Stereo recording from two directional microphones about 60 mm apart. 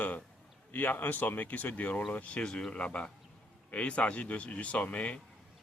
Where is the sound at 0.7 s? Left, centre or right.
Left.